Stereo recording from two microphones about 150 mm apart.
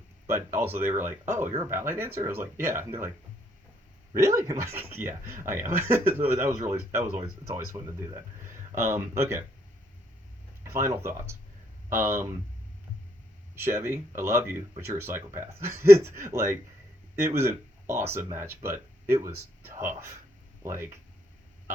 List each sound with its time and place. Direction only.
0.3 s speech: 15° right (ahead or behind)
4.1 s speech: 20° right (ahead or behind)
10.6 s speech: 20° right (ahead or behind)
13.6 s speech: 15° right (ahead or behind)